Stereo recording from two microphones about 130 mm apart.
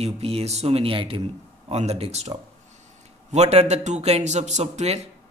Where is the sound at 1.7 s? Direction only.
55° right (ahead or behind).